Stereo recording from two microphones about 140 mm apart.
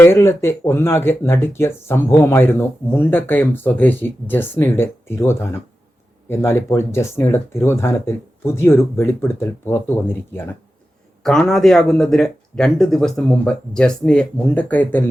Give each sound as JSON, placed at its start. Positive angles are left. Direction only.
{"t": 0.0, "sound": "speech", "side_deg": 15}
{"t": 11.2, "sound": "speech", "side_deg": 5}